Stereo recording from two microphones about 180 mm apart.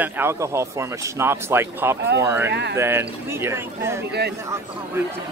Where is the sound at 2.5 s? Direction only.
75° right (ahead or behind).